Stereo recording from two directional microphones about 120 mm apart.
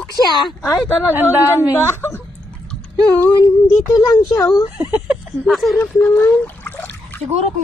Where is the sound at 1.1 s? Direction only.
15° right (ahead or behind).